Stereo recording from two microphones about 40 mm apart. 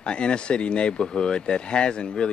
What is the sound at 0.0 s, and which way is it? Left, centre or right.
A man's voice, left.